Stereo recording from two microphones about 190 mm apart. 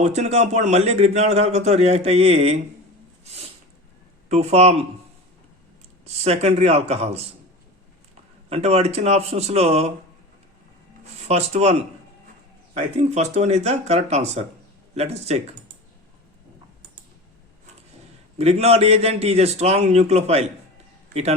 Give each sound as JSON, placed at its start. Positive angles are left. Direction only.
{"t": 0.0, "sound": "a man's voice", "side_deg": -35}
{"t": 4.3, "sound": "a man's voice", "side_deg": -35}
{"t": 6.1, "sound": "a man's voice", "side_deg": -35}
{"t": 8.4, "sound": "a man's voice", "side_deg": -35}
{"t": 11.3, "sound": "a man's voice", "side_deg": -35}
{"t": 18.3, "sound": "a man's voice", "side_deg": -35}